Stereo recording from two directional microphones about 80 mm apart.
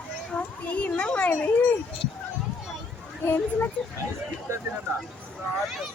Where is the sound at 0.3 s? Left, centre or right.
Centre.